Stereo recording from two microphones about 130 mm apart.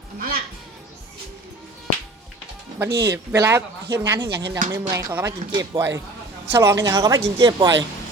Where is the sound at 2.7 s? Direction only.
20° right (ahead or behind).